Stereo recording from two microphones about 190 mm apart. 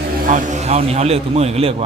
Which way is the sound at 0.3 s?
40° right (ahead or behind).